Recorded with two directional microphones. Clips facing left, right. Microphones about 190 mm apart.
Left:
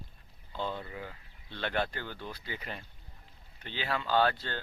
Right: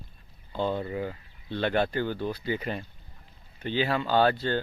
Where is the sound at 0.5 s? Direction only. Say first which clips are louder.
Right 8 dB; 50° right (ahead or behind).